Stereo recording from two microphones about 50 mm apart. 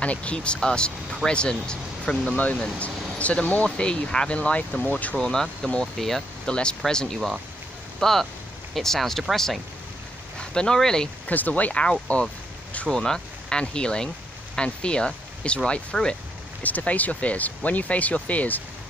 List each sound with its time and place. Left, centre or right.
0.0 s speech: left
2.8 s speech: left
3.6 s speech: centre
5.1 s speech: centre
6.4 s speech: centre
11.2 s speech: left
12.8 s speech: centre
16.6 s speech: left